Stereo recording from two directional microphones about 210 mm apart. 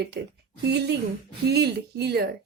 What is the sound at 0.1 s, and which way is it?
A woman's voice, 55° right (ahead or behind).